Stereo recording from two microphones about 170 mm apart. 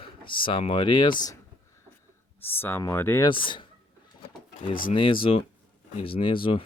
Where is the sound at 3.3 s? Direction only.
30° left (ahead or behind).